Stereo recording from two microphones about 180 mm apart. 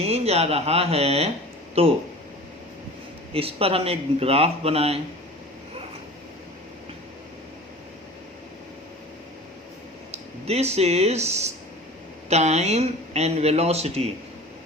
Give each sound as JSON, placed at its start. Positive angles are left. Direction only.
{"t": 0.0, "sound": "speech", "side_deg": -35}
{"t": 3.3, "sound": "speech", "side_deg": -30}
{"t": 10.1, "sound": "speech", "side_deg": -35}